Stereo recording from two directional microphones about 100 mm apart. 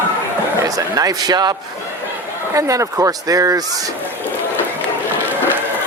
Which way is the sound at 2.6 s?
30° right (ahead or behind).